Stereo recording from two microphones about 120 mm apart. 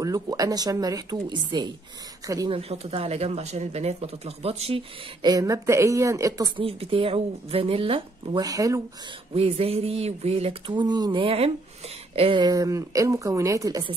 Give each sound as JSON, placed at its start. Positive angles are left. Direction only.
{"t": 0.0, "sound": "speech", "side_deg": -30}
{"t": 2.5, "sound": "speech", "side_deg": -55}
{"t": 5.2, "sound": "a woman's voice", "side_deg": -30}
{"t": 6.5, "sound": "speech", "side_deg": -50}
{"t": 8.4, "sound": "a woman's voice", "side_deg": -30}
{"t": 9.3, "sound": "speech", "side_deg": -55}
{"t": 10.7, "sound": "speech", "side_deg": -40}
{"t": 12.4, "sound": "a woman's voice", "side_deg": -30}